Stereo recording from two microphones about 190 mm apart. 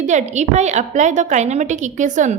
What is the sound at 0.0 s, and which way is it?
A woman's voice, 40° right (ahead or behind).